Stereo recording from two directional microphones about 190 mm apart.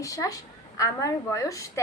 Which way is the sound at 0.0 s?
15° left (ahead or behind).